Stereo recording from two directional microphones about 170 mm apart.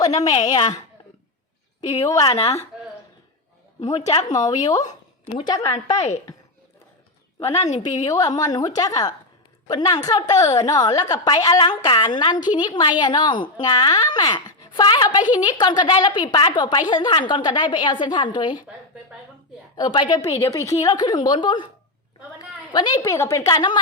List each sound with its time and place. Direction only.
0.0 s a woman's voice: 20° left (ahead or behind)
2.0 s speech: 20° left (ahead or behind)
2.3 s a woman's voice: 35° left (ahead or behind)
4.0 s speech: 45° left (ahead or behind)
4.4 s speech: 20° left (ahead or behind)
7.4 s a woman's voice: 40° left (ahead or behind)
7.8 s speech: 20° left (ahead or behind)
19.7 s speech: 25° left (ahead or behind)
22.7 s speech: 25° left (ahead or behind)